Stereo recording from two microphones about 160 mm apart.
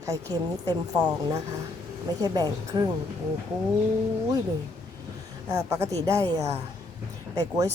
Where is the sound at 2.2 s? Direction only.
25° right (ahead or behind).